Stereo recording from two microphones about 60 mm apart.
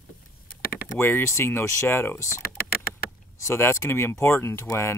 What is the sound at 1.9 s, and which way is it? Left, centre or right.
Speech, left.